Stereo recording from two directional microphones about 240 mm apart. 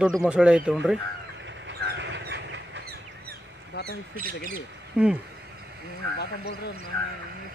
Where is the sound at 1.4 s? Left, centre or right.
Right.